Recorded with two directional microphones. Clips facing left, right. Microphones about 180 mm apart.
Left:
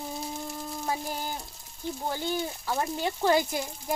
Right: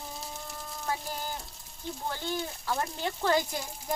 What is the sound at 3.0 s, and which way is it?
Speech, 10° left (ahead or behind).